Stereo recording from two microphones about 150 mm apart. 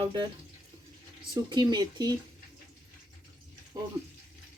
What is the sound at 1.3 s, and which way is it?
Speech, 30° right (ahead or behind).